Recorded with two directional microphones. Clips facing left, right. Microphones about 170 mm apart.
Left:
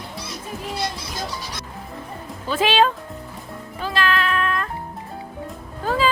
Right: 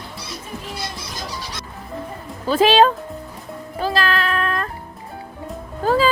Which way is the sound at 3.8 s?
35° right (ahead or behind).